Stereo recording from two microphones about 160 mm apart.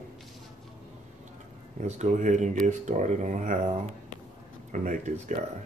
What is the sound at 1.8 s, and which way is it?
Speech, 45° right (ahead or behind).